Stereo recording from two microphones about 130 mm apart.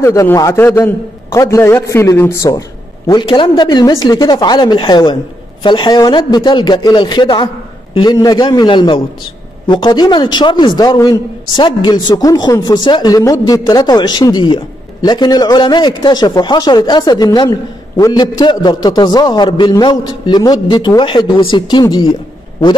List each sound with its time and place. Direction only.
0.0 s a man's voice: 20° left (ahead or behind)
3.1 s a man's voice: 35° left (ahead or behind)